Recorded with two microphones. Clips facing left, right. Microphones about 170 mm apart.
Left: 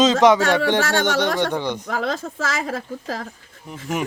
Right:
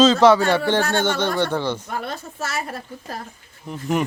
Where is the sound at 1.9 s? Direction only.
90° left.